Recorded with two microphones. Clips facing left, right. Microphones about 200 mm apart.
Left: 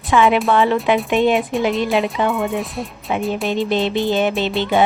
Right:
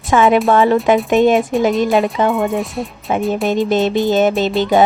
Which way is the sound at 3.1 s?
45° right (ahead or behind).